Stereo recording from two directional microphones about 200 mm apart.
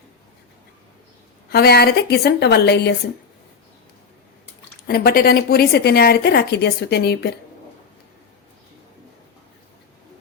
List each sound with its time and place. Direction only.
1.5 s a woman's voice: 50° left (ahead or behind)
4.9 s a woman's voice: 50° left (ahead or behind)